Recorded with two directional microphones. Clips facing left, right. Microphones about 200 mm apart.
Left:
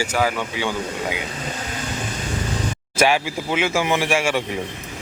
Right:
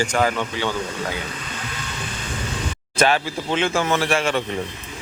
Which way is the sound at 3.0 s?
10° left (ahead or behind).